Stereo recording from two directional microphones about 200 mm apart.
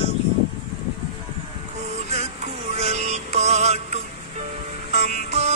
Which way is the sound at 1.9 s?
35° right (ahead or behind).